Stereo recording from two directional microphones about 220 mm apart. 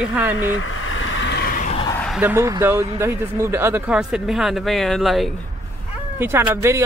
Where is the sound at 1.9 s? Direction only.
Centre (ahead or behind).